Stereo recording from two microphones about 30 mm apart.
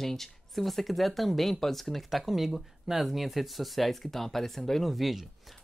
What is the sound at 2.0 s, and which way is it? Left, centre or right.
Speech, centre.